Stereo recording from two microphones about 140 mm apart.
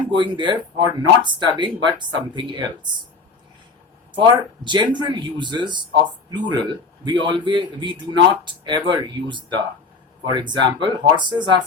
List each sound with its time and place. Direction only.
0.2 s speech: 35° right (ahead or behind)
4.1 s speech: 35° right (ahead or behind)